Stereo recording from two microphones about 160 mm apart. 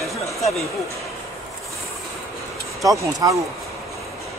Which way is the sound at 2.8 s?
20° right (ahead or behind).